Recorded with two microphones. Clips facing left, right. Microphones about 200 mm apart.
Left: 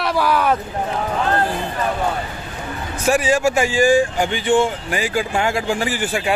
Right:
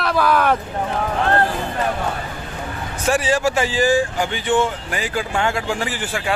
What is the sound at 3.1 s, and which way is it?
Speech, 10° left (ahead or behind).